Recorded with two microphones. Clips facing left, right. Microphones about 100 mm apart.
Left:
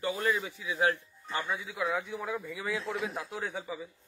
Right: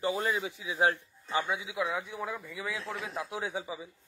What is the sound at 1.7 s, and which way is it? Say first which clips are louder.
Speech: left 1 dB; centre (ahead or behind).